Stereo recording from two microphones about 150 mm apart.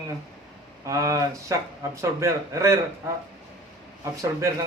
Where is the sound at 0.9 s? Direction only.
20° right (ahead or behind).